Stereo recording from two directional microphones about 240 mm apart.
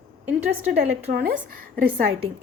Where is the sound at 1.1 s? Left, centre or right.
Right.